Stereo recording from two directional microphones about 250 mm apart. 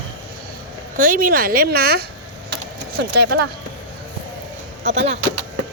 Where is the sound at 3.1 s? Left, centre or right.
Right.